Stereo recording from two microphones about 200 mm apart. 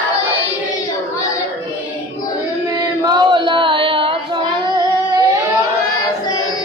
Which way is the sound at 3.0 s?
20° right (ahead or behind).